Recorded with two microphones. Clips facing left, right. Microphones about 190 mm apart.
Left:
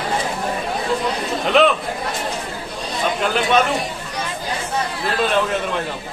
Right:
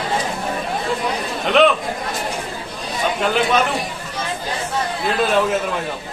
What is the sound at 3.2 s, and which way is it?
Speech, centre (ahead or behind).